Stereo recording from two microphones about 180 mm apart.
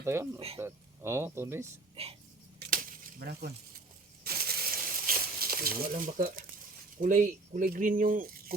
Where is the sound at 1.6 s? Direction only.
35° right (ahead or behind).